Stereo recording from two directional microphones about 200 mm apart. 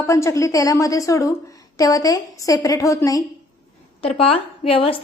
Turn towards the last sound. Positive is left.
turn(degrees=25)  # may be behind; listen again after turning